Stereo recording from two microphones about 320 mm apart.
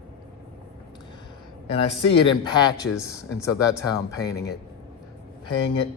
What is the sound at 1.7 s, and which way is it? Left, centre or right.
Speech, centre.